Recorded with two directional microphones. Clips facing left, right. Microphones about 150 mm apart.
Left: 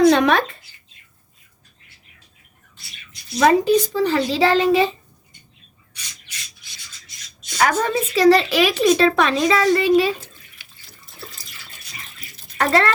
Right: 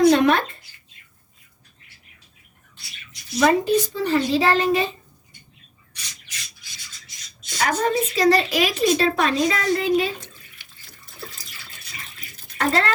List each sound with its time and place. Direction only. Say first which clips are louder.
0.1 s speech: left 1 dB; 90° left
3.4 s a woman's voice: left 3 dB; 90° left
7.6 s a woman's voice: left 2 dB; 90° left
12.5 s speech: left 4 dB; 90° left